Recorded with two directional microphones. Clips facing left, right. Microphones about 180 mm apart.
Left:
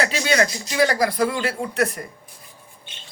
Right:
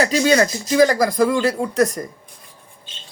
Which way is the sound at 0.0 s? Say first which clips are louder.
Right 5 dB; 40° right (ahead or behind).